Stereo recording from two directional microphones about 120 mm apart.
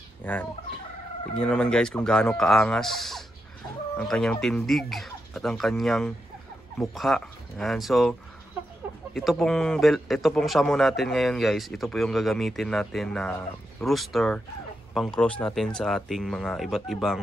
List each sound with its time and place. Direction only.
0.2 s fowl: 15° left (ahead or behind)
1.4 s a man's voice: 5° left (ahead or behind)
9.1 s a man's voice: centre (ahead or behind)